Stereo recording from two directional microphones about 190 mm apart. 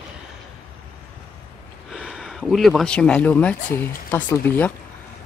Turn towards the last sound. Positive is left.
turn(degrees=10)  # may be behind; listen again after turning